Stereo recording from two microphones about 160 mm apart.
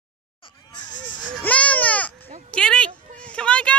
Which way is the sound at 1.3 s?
10° left (ahead or behind).